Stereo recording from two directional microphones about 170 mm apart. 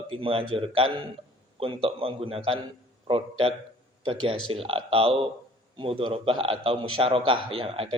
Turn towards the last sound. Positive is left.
turn(degrees=-35)  # may be behind; listen again after turning